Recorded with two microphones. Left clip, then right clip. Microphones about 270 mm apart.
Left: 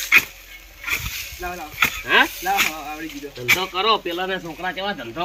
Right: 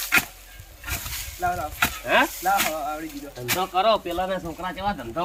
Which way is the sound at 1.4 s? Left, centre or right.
Centre.